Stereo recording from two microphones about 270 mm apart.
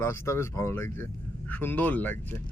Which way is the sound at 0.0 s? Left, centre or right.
Centre.